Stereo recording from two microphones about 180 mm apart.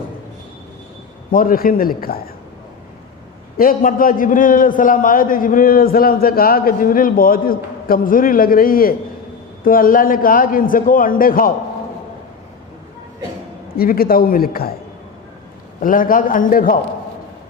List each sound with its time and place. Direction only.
1.3 s a man's voice: 50° left (ahead or behind)
3.6 s a man's voice: 50° left (ahead or behind)
13.7 s a man's voice: 55° left (ahead or behind)
15.8 s a man's voice: 50° left (ahead or behind)